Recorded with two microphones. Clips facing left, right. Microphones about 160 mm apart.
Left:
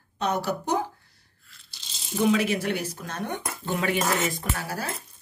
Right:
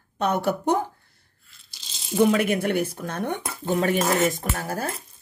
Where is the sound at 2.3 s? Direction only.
55° right (ahead or behind).